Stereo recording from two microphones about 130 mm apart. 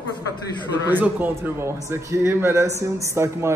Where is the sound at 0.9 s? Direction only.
15° right (ahead or behind).